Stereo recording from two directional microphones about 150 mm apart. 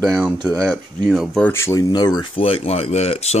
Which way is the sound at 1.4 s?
15° left (ahead or behind).